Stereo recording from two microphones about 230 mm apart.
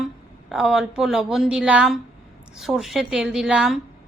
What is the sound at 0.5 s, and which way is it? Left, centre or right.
A woman's voice, centre.